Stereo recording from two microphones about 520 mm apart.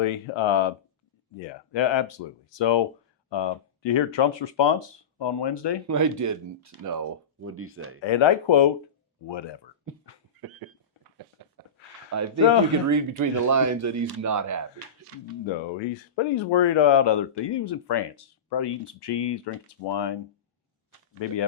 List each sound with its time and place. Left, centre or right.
0.0 s speech: left
5.9 s speech: right
8.0 s speech: left
9.9 s a sound: right
11.4 s a sound: right
12.1 s speech: right
15.8 s speech: left
21.2 s speech: left